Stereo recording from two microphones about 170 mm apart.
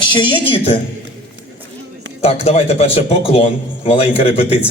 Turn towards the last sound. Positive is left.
turn(degrees=35)  # may be behind; listen again after turning